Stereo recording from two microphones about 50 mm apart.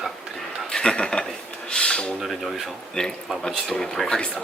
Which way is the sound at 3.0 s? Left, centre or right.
Centre.